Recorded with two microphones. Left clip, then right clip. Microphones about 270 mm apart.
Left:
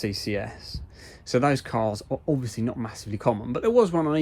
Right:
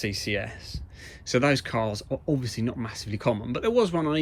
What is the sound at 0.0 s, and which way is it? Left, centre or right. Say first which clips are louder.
Speech: even; centre.